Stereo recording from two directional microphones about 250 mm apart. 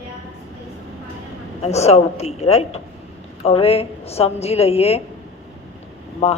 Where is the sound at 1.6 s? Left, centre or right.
Left.